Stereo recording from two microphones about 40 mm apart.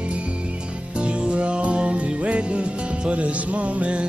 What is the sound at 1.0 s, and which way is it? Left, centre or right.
Music, right.